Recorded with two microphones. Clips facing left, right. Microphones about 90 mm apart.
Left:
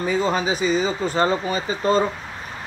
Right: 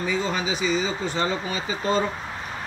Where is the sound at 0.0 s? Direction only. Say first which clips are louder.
Left 5 dB; 40° left (ahead or behind).